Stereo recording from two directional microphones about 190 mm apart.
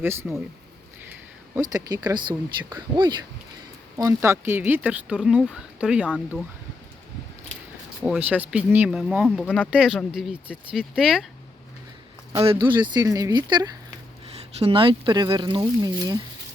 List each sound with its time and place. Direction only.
0.0 s speech: 15° right (ahead or behind)
1.7 s speech: 20° right (ahead or behind); by 6.4 s centre (ahead or behind)
8.0 s speech: 5° right (ahead or behind)
12.5 s speech: 25° right (ahead or behind)